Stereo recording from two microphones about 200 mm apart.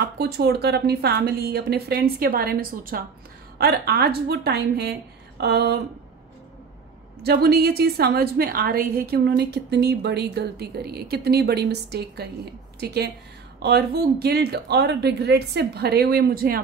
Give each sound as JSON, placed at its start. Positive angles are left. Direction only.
{"t": 0.0, "sound": "a woman's voice", "side_deg": -55}
{"t": 7.2, "sound": "a woman's voice", "side_deg": -50}